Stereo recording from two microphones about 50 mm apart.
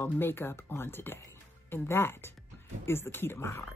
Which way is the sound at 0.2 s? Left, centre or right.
Left.